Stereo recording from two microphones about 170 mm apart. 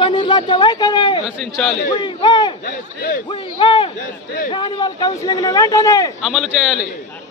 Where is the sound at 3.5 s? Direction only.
30° left (ahead or behind).